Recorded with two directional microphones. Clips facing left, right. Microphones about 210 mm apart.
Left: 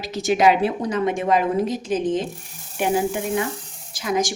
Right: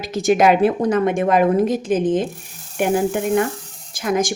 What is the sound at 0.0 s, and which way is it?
A woman's voice, 50° right (ahead or behind).